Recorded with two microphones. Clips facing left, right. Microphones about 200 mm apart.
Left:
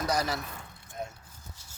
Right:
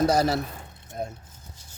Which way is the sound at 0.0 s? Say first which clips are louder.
Right 8 dB; 30° right (ahead or behind).